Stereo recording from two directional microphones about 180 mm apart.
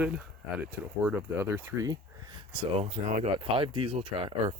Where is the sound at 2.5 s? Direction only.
40° right (ahead or behind).